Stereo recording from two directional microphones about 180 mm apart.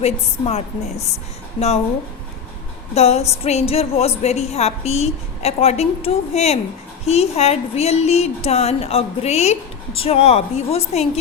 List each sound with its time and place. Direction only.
0.0 s a woman's voice: 35° left (ahead or behind)
2.9 s a woman's voice: 35° left (ahead or behind)